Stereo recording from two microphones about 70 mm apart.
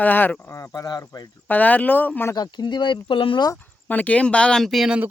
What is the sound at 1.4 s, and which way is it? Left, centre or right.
Speech, left.